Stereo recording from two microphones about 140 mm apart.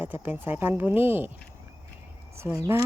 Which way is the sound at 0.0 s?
15° right (ahead or behind).